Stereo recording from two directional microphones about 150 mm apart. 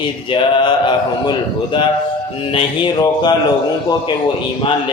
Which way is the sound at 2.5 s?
30° left (ahead or behind).